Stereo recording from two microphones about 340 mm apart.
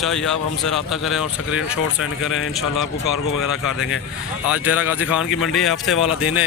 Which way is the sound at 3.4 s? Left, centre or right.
Centre.